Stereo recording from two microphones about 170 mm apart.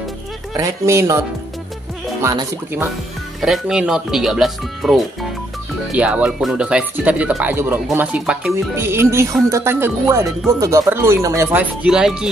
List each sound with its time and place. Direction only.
0.6 s speech: 20° right (ahead or behind)
2.2 s speech: 15° right (ahead or behind)
3.3 s speech: centre (ahead or behind)